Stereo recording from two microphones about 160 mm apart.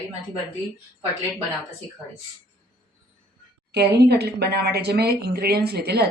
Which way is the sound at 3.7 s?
90° right.